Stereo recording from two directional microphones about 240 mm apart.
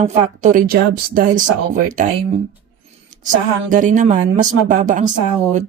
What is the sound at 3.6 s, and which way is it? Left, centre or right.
Speech, right.